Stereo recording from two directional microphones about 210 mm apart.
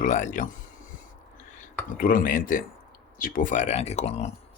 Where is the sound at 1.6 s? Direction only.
40° left (ahead or behind).